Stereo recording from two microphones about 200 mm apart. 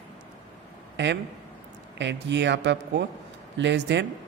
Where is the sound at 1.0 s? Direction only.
60° right (ahead or behind).